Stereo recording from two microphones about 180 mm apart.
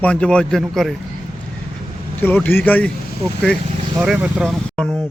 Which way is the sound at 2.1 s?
10° left (ahead or behind).